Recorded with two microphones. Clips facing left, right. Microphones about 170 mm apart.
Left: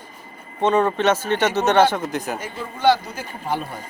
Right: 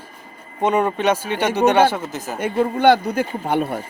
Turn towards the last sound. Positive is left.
turn(degrees=-65)  # may be behind; listen again after turning